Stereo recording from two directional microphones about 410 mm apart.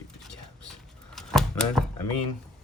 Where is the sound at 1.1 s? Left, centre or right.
Centre.